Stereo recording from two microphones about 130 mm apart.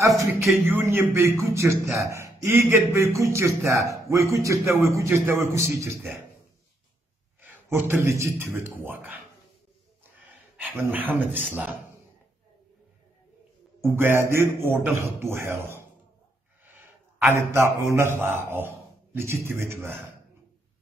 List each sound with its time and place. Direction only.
0.7 s a man's voice: 15° right (ahead or behind)
7.4 s a man's voice: 15° right (ahead or behind)
10.6 s speech: 10° right (ahead or behind)
13.7 s a man's voice: 20° right (ahead or behind)
17.3 s a man's voice: 20° right (ahead or behind)